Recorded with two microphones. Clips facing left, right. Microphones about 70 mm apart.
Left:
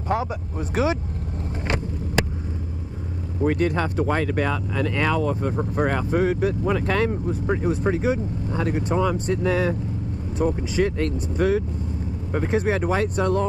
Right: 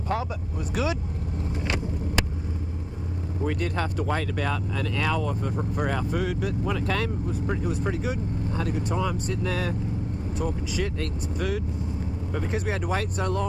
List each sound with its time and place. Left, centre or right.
0.8 s speech: left
3.4 s speech: left